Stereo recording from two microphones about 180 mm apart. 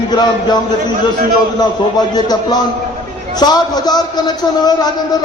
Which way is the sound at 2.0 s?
20° left (ahead or behind).